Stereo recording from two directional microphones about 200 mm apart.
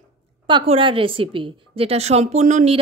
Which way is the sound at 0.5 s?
25° right (ahead or behind).